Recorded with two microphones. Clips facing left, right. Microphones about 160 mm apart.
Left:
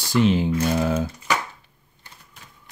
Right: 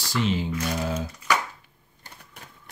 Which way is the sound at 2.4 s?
60° right (ahead or behind).